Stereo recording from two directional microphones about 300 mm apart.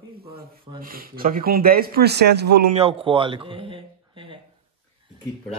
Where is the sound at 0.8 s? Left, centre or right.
Right.